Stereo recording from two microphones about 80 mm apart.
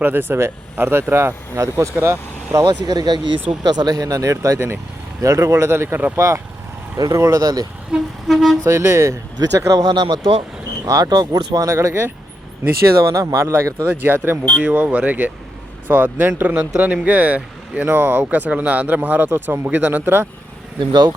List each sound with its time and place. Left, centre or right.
0.0 s speech: right
2.6 s speech: right
7.4 s speech: right
7.9 s vehicle: centre
8.3 s speech: centre
8.6 s speech: right
9.4 s speech: right
9.8 s speech: right
10.8 s speech: right
11.7 s speech: right
13.8 s speech: right
20.7 s speech: right